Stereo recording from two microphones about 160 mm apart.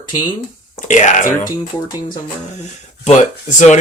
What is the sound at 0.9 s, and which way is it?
Speech, 50° left (ahead or behind).